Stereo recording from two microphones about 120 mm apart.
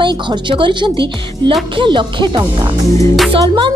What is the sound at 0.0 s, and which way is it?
A woman's voice, 40° right (ahead or behind).